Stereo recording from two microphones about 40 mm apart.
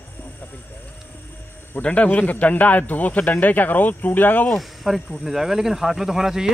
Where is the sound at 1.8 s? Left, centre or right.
Left.